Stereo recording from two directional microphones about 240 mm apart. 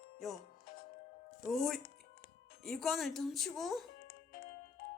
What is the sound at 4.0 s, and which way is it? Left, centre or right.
Music, left.